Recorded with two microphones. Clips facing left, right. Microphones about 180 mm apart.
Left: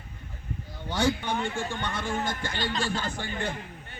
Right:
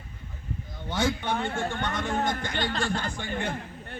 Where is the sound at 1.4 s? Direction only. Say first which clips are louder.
Right 1 dB; 50° right (ahead or behind).